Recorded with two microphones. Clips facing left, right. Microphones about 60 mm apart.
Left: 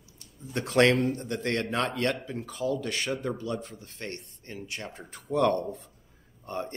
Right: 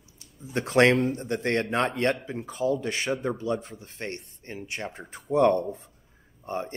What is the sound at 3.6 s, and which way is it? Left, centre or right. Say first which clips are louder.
Speech: right 3 dB; right.